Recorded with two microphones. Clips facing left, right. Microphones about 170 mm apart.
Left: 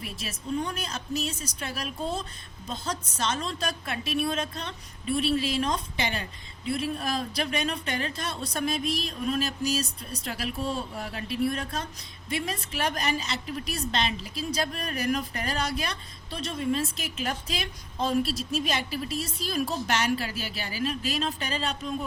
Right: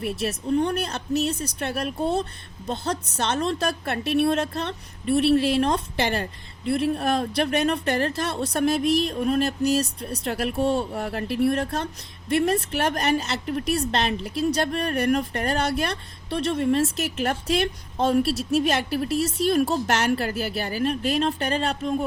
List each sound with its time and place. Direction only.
0.0 s a woman's voice: 65° right (ahead or behind)